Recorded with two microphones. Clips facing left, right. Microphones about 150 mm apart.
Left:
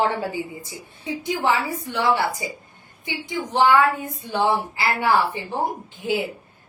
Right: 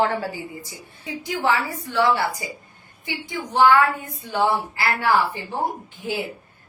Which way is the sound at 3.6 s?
20° left (ahead or behind).